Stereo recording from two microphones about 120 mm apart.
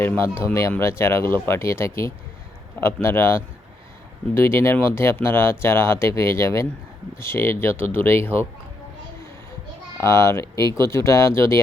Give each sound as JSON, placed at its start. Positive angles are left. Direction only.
{"t": 0.0, "sound": "speech", "side_deg": 20}
{"t": 10.0, "sound": "speech", "side_deg": 25}